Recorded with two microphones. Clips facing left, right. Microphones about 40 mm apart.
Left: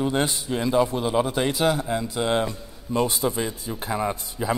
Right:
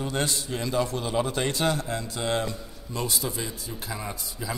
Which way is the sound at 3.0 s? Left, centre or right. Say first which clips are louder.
Left 2 dB; left.